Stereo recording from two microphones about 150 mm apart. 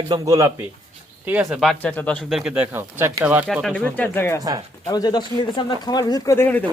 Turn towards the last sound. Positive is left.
turn(degrees=15)  # may be behind; listen again after turning